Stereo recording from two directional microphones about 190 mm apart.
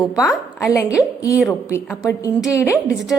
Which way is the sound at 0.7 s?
15° left (ahead or behind).